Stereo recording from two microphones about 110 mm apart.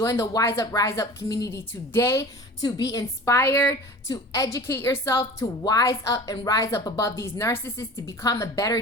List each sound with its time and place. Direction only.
0.0 s a woman's voice: 30° left (ahead or behind)
3.3 s a woman's voice: 20° left (ahead or behind)